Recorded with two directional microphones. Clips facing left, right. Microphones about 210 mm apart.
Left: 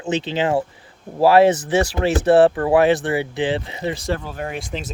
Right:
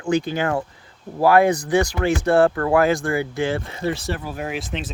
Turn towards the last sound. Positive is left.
turn(degrees=0)  # may be behind; listen again after turning